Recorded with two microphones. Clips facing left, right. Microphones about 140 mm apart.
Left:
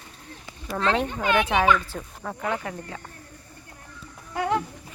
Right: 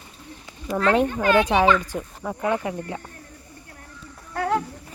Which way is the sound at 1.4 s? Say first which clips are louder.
Right 2 dB; 15° right (ahead or behind).